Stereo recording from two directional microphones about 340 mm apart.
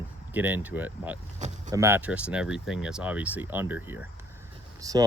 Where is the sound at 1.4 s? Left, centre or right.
Right.